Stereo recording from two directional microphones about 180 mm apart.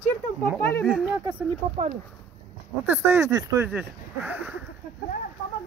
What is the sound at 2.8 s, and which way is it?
Speech, 10° right (ahead or behind).